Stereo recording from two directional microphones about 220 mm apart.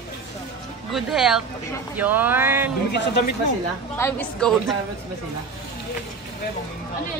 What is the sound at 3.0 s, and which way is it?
Speech, 50° left (ahead or behind).